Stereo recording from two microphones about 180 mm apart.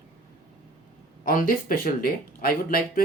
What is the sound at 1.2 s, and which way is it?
Speech, 50° left (ahead or behind).